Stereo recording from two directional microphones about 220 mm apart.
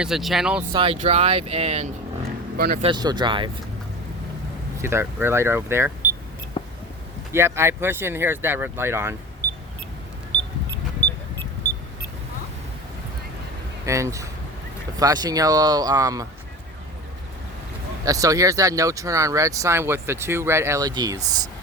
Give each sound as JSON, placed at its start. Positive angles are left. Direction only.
{"t": 0.0, "sound": "speech", "side_deg": 0}
{"t": 0.7, "sound": "speech", "side_deg": -25}
{"t": 2.6, "sound": "speech", "side_deg": -45}
{"t": 2.8, "sound": "speech", "side_deg": -20}
{"t": 4.8, "sound": "speech", "side_deg": -10}
{"t": 7.3, "sound": "speech", "side_deg": -10}
{"t": 13.8, "sound": "speech", "side_deg": -15}
{"t": 18.0, "sound": "speech", "side_deg": -15}